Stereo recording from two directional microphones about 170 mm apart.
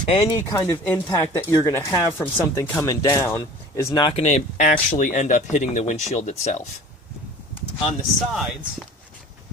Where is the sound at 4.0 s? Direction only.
35° left (ahead or behind).